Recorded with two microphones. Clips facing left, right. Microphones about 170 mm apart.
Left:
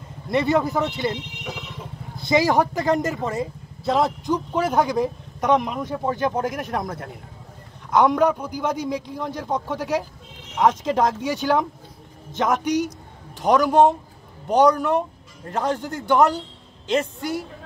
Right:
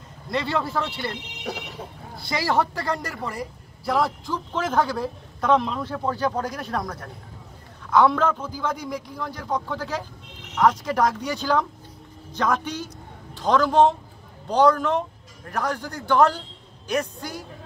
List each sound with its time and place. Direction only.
0.3 s speech: 20° left (ahead or behind)
2.1 s a man's voice: 20° left (ahead or behind)